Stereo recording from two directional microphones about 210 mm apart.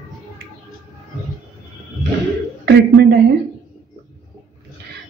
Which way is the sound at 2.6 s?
55° right (ahead or behind).